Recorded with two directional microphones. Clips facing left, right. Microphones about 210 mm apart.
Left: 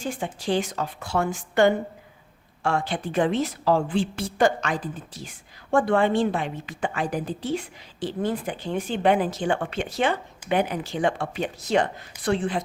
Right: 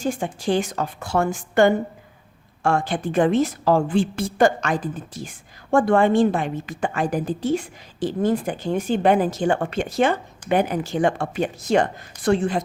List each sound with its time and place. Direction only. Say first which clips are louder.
0.0 s a woman's voice: right 5 dB; 45° right (ahead or behind)